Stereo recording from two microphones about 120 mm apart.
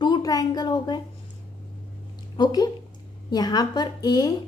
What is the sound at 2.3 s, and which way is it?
A woman's voice, 35° left (ahead or behind).